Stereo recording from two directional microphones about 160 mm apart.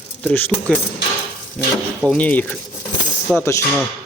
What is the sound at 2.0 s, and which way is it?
A man's voice, 10° left (ahead or behind).